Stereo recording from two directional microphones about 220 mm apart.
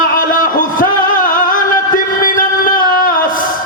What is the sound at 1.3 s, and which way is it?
Music, 40° left (ahead or behind).